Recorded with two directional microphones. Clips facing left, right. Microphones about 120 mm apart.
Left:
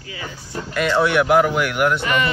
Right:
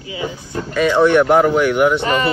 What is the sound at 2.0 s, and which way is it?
Speech, 35° right (ahead or behind).